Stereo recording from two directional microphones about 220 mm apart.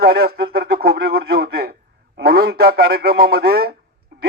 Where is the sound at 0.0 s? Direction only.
45° right (ahead or behind).